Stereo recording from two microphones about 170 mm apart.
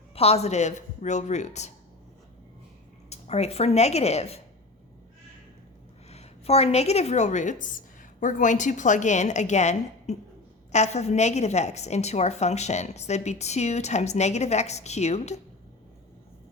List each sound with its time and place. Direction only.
0.1 s a woman's voice: 35° left (ahead or behind)
3.1 s speech: 40° left (ahead or behind)
6.1 s a woman's voice: 40° left (ahead or behind)